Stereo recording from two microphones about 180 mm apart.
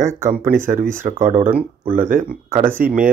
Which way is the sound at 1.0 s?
45° right (ahead or behind).